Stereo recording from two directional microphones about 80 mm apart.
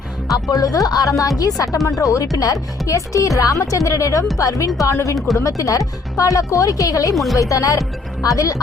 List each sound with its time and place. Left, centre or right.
0.5 s speech: left